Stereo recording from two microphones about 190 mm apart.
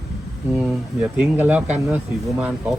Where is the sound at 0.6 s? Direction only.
5° right (ahead or behind).